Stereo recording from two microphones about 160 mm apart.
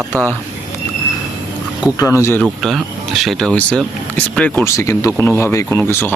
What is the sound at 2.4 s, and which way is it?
Speech, centre (ahead or behind).